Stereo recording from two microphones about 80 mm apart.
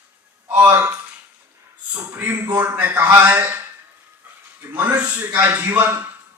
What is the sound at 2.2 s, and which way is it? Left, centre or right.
Speech, right.